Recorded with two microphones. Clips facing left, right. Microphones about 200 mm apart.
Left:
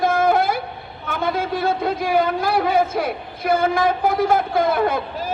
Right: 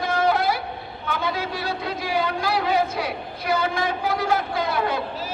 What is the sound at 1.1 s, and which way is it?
Speech, 50° left (ahead or behind).